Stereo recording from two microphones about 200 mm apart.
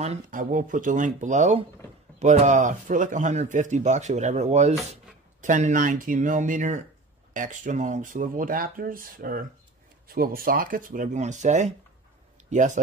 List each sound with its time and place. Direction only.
0.0 s speech: 35° right (ahead or behind)